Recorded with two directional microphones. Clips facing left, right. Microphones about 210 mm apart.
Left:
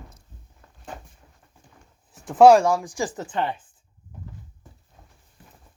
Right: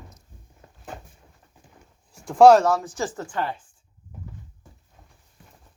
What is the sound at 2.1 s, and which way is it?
Speech, 5° left (ahead or behind).